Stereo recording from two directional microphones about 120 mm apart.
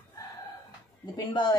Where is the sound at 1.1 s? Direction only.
40° left (ahead or behind).